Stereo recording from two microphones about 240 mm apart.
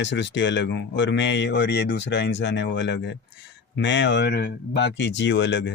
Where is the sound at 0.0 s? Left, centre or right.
Left.